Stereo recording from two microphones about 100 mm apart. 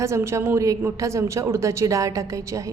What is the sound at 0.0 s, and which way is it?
A woman's voice, 30° right (ahead or behind).